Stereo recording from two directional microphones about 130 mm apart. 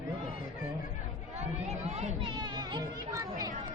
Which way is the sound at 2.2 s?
35° right (ahead or behind).